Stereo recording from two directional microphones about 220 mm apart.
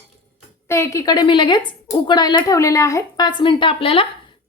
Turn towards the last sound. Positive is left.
turn(degrees=25)  # may be behind; listen again after turning